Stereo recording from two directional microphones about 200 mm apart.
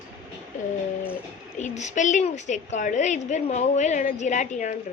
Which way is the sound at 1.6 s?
35° left (ahead or behind).